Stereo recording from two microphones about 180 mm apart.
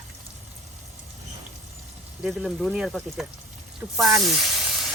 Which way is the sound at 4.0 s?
Centre (ahead or behind).